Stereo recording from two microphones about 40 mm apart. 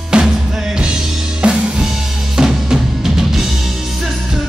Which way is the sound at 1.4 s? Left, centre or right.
Centre.